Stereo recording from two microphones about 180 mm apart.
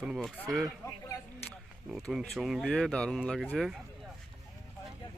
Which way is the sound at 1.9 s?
Centre (ahead or behind).